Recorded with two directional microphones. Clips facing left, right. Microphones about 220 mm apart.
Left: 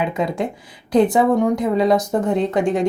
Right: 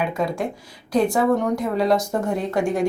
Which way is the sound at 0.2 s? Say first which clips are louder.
Left 2 dB; 20° left (ahead or behind).